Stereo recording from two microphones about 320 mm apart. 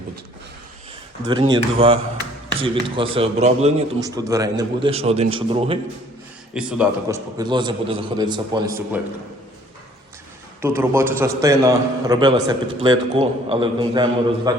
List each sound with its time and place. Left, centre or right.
1.2 s a man's voice: centre
6.5 s a man's voice: centre
10.6 s a man's voice: centre